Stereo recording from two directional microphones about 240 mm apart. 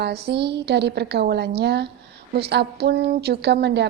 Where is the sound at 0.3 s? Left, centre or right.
Right.